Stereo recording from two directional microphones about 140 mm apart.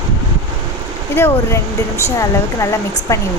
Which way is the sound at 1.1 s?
20° left (ahead or behind).